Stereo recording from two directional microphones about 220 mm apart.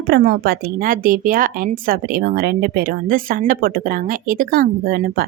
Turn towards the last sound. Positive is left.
turn(degrees=-45)  # may be behind; listen again after turning